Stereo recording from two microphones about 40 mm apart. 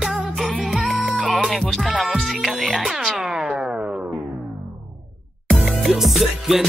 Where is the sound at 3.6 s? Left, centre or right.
Right.